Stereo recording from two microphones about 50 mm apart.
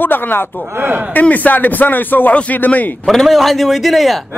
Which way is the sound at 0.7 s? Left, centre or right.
Right.